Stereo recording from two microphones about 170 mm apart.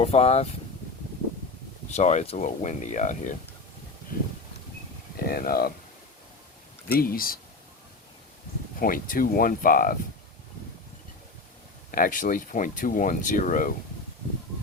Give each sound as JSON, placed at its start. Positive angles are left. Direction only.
{"t": 0.0, "sound": "speech", "side_deg": 40}
{"t": 2.0, "sound": "speech", "side_deg": 40}
{"t": 5.1, "sound": "speech", "side_deg": 60}
{"t": 6.8, "sound": "speech", "side_deg": 60}
{"t": 8.8, "sound": "speech", "side_deg": 55}
{"t": 11.9, "sound": "speech", "side_deg": 55}